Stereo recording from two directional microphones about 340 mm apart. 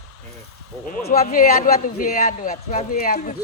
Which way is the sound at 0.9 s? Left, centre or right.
Left.